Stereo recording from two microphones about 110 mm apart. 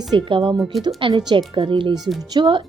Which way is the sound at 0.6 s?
Centre (ahead or behind).